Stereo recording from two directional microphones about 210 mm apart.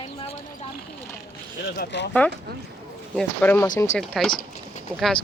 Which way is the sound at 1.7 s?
55° left (ahead or behind).